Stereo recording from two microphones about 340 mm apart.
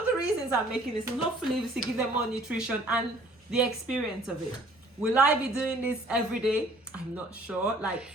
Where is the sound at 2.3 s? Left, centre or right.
Centre.